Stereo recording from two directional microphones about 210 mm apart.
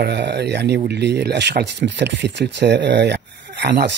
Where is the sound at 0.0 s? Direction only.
55° right (ahead or behind).